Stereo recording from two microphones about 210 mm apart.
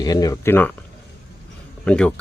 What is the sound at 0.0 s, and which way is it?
Speech, 20° left (ahead or behind).